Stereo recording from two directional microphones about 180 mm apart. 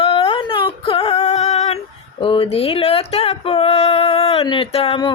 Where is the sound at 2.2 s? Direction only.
30° left (ahead or behind).